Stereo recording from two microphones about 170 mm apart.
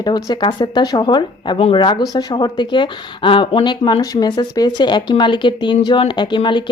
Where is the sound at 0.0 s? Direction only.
25° left (ahead or behind).